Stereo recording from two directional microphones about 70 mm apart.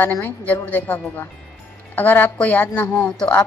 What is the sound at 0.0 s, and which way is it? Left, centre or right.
A woman's voice, left.